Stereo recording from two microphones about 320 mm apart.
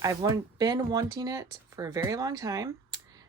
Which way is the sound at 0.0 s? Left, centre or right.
Centre.